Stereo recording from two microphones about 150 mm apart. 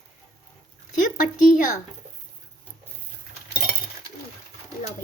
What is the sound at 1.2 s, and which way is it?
Speech, 65° left (ahead or behind).